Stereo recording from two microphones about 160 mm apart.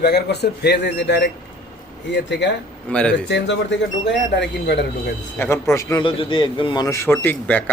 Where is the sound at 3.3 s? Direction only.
90° left.